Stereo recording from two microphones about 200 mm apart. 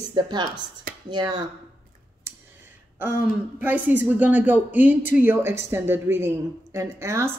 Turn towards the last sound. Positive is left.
turn(degrees=-15)  # may be behind; listen again after turning